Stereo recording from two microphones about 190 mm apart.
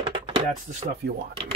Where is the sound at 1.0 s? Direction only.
60° right (ahead or behind).